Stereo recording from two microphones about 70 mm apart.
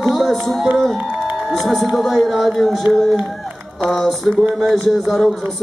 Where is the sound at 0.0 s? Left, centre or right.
Centre.